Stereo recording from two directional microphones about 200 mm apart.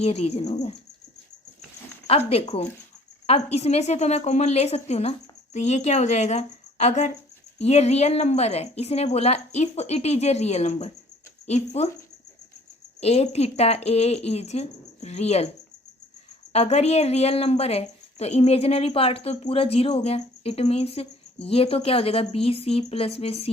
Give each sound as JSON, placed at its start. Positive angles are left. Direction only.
{"t": 0.0, "sound": "a woman's voice", "side_deg": 30}
{"t": 2.0, "sound": "a woman's voice", "side_deg": 30}
{"t": 13.0, "sound": "a woman's voice", "side_deg": 30}
{"t": 16.5, "sound": "a woman's voice", "side_deg": 30}